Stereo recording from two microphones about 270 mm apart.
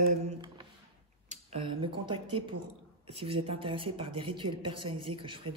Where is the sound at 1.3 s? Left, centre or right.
Right.